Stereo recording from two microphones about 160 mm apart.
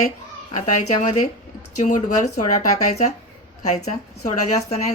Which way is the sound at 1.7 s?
50° left (ahead or behind).